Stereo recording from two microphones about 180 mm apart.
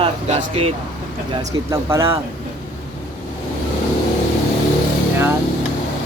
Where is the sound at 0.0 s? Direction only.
35° right (ahead or behind).